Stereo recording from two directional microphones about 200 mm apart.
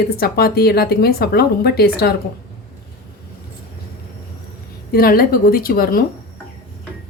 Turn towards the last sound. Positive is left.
turn(degrees=50)  # may be behind; listen again after turning